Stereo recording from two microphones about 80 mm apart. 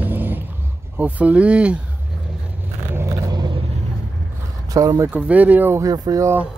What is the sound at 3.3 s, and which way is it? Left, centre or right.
Vehicle, right.